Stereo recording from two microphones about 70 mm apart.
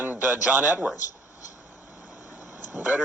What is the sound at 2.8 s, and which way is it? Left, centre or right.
Speech, right.